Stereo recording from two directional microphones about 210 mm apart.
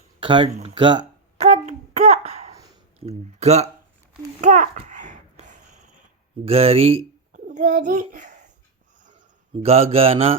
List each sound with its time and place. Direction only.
0.2 s mantra: 25° right (ahead or behind)
0.6 s a sound: 25° right (ahead or behind)
3.0 s speech: 30° right (ahead or behind)
4.4 s a sound: 35° right (ahead or behind)
6.4 s a child's voice: 30° right (ahead or behind)
9.6 s mantra: 30° right (ahead or behind)